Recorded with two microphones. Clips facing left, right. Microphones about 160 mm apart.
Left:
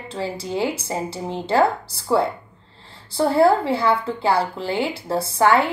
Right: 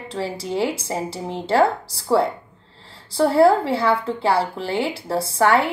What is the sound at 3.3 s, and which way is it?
Speech, 30° right (ahead or behind).